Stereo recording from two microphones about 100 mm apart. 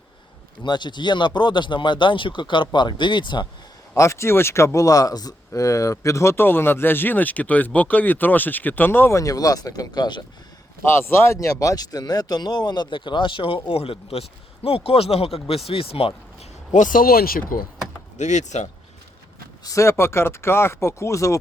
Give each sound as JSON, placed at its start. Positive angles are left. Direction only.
{"t": 0.6, "sound": "speech", "side_deg": 50}
{"t": 3.9, "sound": "speech", "side_deg": 30}
{"t": 10.8, "sound": "a man's voice", "side_deg": 25}
{"t": 18.5, "sound": "speech", "side_deg": 90}
{"t": 19.6, "sound": "speech", "side_deg": 30}